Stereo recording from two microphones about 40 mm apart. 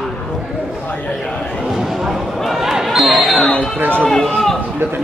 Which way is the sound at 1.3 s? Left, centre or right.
Left.